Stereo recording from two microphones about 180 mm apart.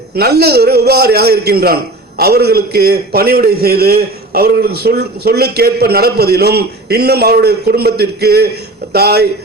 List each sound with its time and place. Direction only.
0.2 s a man's voice: 65° right (ahead or behind)